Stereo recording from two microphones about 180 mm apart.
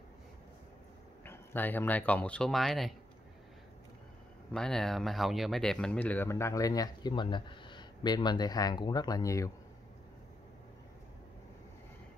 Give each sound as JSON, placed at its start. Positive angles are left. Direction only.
{"t": 1.2, "sound": "speech", "side_deg": 10}
{"t": 4.5, "sound": "speech", "side_deg": 5}